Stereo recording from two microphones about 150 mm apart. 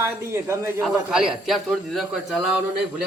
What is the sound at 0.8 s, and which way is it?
A man's voice, 5° right (ahead or behind).